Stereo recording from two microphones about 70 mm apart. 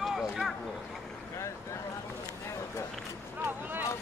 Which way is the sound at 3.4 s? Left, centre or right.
Right.